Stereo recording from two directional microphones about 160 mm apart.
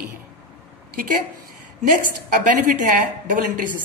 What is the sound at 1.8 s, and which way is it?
A woman's voice, 55° right (ahead or behind).